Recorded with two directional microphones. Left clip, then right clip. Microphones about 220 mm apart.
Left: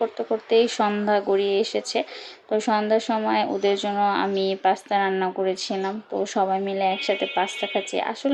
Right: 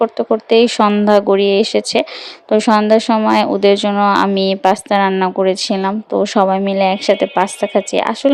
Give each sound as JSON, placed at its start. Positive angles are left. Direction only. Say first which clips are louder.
{"t": 0.0, "sound": "speech", "louder": "right 10 dB", "side_deg": -45}